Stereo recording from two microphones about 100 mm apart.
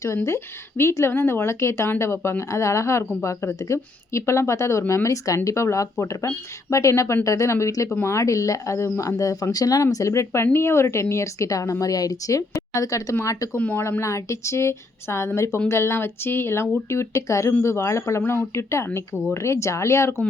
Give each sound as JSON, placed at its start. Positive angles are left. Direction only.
{"t": 0.3, "sound": "a woman's voice", "side_deg": 25}
{"t": 13.6, "sound": "speech", "side_deg": 15}
{"t": 14.0, "sound": "a woman's voice", "side_deg": 30}